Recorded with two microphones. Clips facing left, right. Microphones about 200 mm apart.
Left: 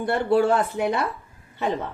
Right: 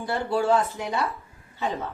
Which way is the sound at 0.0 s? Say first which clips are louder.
Left 5 dB; 60° left (ahead or behind).